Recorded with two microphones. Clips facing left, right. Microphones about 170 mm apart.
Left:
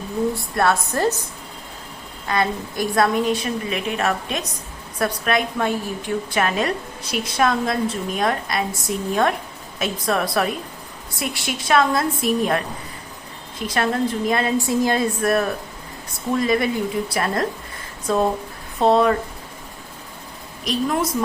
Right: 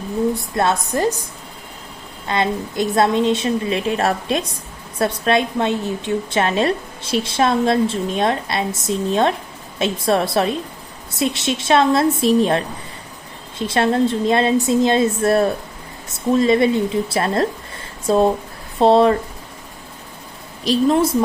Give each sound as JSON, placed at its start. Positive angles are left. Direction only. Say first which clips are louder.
{"t": 0.3, "sound": "a woman's voice", "louder": "right 1 dB", "side_deg": -20}
{"t": 2.2, "sound": "a woman's voice", "louder": "right 2 dB", "side_deg": -25}
{"t": 20.7, "sound": "a woman's voice", "louder": "right 6 dB", "side_deg": -30}